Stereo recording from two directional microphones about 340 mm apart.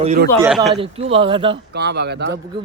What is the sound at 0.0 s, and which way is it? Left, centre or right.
Speech, centre.